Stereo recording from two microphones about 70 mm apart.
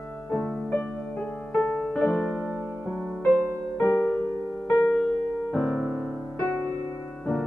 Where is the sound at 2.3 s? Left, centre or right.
Centre.